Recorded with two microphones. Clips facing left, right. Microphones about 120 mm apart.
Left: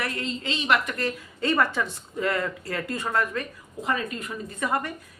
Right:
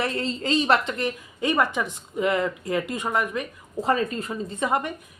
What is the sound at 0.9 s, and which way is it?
Speech, 20° right (ahead or behind).